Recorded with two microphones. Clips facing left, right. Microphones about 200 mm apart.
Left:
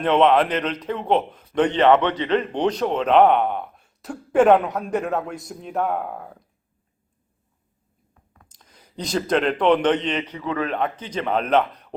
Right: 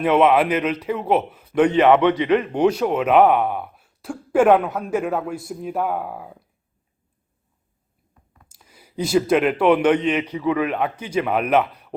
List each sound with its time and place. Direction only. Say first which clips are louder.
0.0 s a man's voice: right 1 dB; 10° right (ahead or behind)
8.4 s a man's voice: right 5 dB; 10° right (ahead or behind)